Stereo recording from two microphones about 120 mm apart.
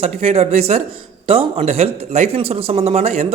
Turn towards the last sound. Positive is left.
turn(degrees=-60)  # may be behind; listen again after turning